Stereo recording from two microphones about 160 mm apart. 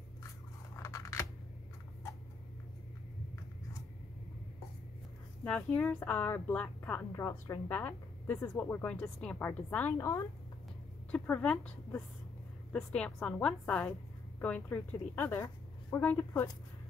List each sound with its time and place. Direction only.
0.8 s camera: 20° left (ahead or behind)
5.4 s a woman's voice: 5° left (ahead or behind)